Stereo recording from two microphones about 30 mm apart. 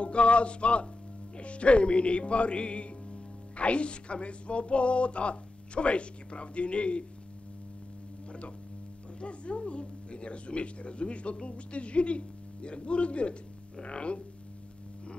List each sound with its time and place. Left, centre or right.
0.0 s speech: left
8.3 s a sound: left
9.2 s speech: left